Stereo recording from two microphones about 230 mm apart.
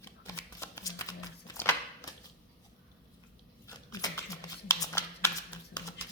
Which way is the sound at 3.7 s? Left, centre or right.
Centre.